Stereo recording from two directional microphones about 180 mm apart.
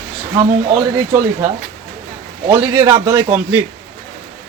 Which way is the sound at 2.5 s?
15° right (ahead or behind).